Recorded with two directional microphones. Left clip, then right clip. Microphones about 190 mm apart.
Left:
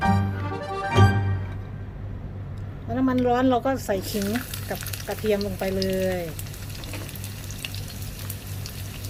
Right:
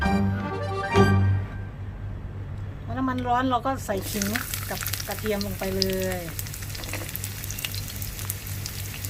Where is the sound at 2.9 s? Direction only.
30° left (ahead or behind).